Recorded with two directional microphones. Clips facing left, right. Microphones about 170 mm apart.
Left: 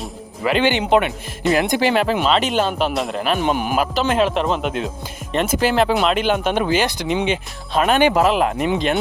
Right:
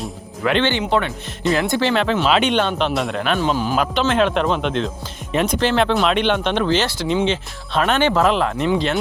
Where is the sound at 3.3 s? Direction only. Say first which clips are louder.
Even; 15° left (ahead or behind).